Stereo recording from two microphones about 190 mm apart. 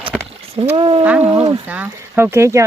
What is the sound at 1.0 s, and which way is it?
Speech, 10° right (ahead or behind).